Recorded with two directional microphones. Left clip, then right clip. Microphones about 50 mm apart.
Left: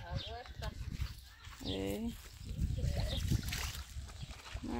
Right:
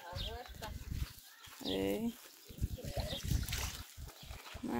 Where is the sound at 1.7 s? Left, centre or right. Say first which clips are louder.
Right 3 dB; centre.